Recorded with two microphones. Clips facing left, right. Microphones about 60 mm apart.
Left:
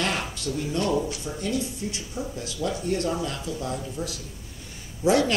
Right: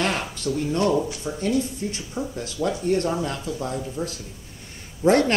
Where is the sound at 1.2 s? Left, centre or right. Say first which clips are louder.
Right 5 dB; right.